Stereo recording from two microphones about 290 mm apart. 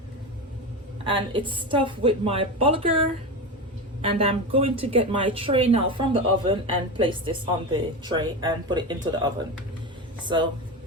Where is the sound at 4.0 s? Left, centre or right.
Centre.